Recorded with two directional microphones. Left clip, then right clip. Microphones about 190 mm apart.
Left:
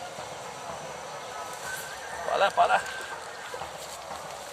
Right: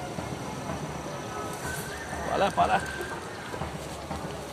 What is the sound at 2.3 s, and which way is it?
Clip-clop, 50° left (ahead or behind).